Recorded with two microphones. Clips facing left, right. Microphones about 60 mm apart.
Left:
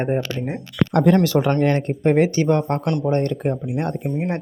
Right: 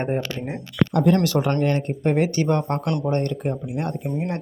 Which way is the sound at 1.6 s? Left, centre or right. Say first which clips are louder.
Left 3 dB; left.